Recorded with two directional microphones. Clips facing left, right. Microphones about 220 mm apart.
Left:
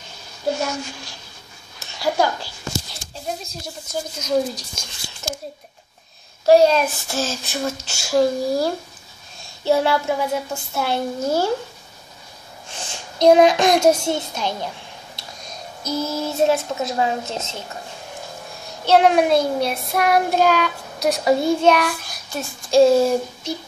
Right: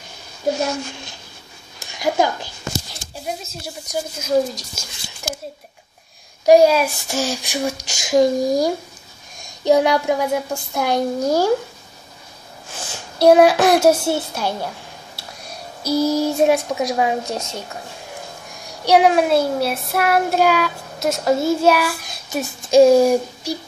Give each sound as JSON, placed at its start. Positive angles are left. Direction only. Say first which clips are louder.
{"t": 1.8, "sound": "speech", "louder": "right 1 dB", "side_deg": -15}
{"t": 3.8, "sound": "speech", "louder": "right 3 dB", "side_deg": -15}
{"t": 4.3, "sound": "child singing", "louder": "right 2 dB", "side_deg": -5}
{"t": 6.4, "sound": "speech", "louder": "right 2 dB", "side_deg": -15}
{"t": 12.7, "sound": "speech", "louder": "right 2 dB", "side_deg": -10}
{"t": 18.9, "sound": "child singing", "louder": "right 1 dB", "side_deg": -10}
{"t": 22.1, "sound": "speech", "louder": "right 4 dB", "side_deg": -20}